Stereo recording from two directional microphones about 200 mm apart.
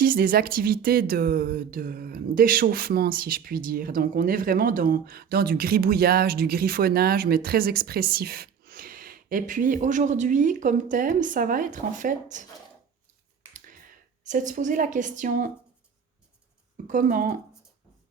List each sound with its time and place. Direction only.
0.0 s speech: 45° right (ahead or behind)
13.5 s a sound: 45° right (ahead or behind)
16.8 s speech: 40° right (ahead or behind)